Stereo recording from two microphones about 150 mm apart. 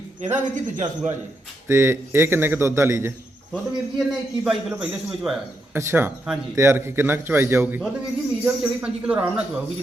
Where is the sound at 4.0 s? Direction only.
Centre (ahead or behind).